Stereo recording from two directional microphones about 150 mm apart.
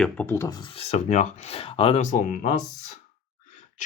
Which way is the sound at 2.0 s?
60° left (ahead or behind).